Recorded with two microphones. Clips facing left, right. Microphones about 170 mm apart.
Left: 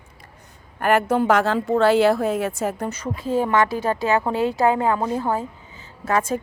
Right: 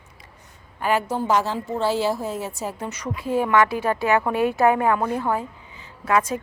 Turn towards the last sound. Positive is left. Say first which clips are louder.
# even
turn(degrees=40)  # may be behind; listen again after turning